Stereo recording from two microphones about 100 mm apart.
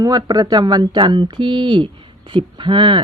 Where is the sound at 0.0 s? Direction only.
40° right (ahead or behind).